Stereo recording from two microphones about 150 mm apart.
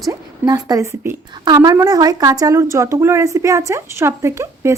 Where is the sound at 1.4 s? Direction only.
30° right (ahead or behind).